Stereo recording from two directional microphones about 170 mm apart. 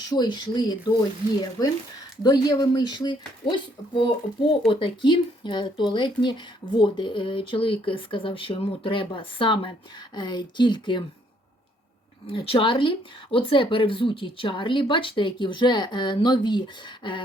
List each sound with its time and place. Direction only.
0.1 s speech: 25° left (ahead or behind)
12.3 s speech: 30° left (ahead or behind)